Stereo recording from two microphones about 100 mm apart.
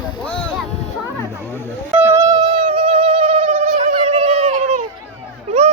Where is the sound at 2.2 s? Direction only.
40° right (ahead or behind).